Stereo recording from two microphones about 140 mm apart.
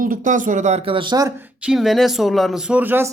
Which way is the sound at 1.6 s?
Centre (ahead or behind).